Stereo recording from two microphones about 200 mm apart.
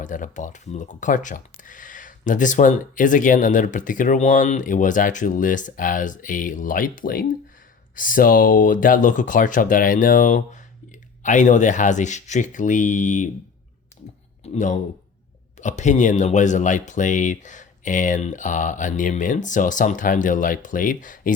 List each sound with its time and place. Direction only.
0.0 s speech: 40° left (ahead or behind)
14.4 s speech: 35° left (ahead or behind)